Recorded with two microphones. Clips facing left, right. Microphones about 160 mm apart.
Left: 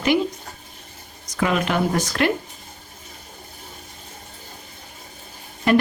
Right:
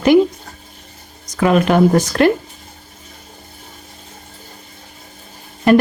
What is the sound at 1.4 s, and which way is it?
Speech, 45° right (ahead or behind).